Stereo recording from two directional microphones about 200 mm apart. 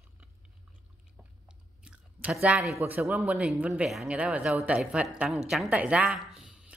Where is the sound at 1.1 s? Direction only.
5° right (ahead or behind).